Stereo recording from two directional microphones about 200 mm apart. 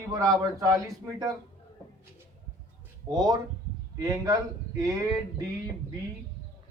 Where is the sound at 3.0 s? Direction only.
20° right (ahead or behind).